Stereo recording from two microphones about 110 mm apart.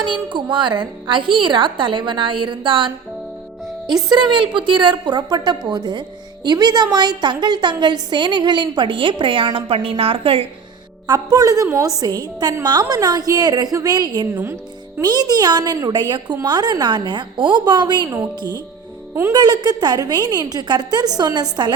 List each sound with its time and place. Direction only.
0.0 s a woman's voice: 45° right (ahead or behind)
11.0 s a woman's voice: 35° right (ahead or behind)
14.3 s speech: 20° right (ahead or behind)
15.0 s a woman's voice: 35° right (ahead or behind)